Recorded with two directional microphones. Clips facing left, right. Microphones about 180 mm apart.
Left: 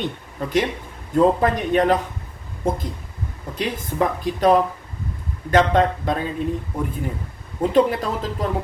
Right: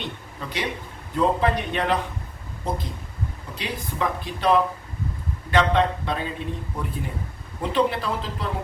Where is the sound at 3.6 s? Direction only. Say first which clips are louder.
Left 5 dB; 45° left (ahead or behind).